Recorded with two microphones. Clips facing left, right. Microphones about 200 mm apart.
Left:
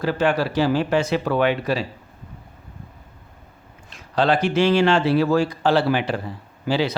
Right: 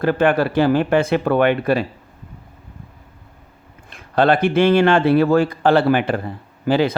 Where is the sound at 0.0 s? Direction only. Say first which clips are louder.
Right 4 dB; 55° right (ahead or behind).